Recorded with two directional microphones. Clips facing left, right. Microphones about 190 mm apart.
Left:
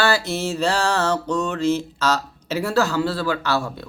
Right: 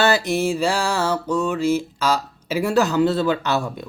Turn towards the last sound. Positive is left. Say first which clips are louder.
# right 1 dB
turn(degrees=-20)  # may be behind; listen again after turning